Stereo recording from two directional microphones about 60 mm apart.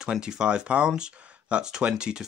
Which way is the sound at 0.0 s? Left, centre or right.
Centre.